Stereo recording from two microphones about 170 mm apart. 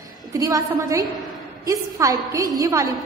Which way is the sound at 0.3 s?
20° right (ahead or behind).